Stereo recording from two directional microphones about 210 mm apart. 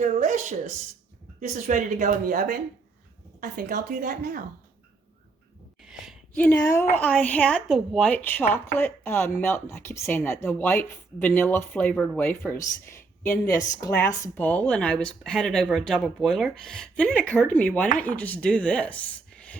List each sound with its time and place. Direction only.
0.0 s speech: 35° right (ahead or behind)
5.8 s a woman's voice: centre (ahead or behind)